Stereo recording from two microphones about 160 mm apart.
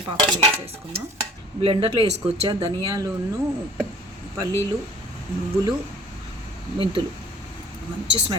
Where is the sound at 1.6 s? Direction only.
35° right (ahead or behind).